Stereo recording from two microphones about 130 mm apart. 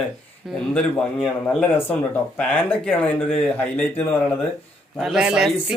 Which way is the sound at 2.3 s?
10° left (ahead or behind).